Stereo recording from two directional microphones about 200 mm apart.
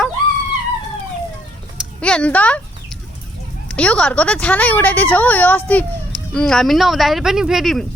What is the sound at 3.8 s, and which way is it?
A woman's voice, 5° left (ahead or behind).